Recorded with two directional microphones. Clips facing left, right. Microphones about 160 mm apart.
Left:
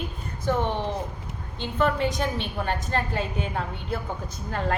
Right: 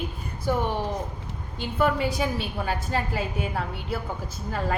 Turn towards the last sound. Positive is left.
turn(degrees=-5)  # may be behind; listen again after turning